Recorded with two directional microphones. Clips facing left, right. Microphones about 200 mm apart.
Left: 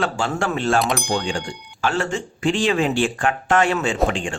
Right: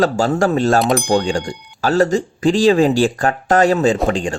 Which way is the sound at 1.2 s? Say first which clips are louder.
Right 6 dB; 40° right (ahead or behind).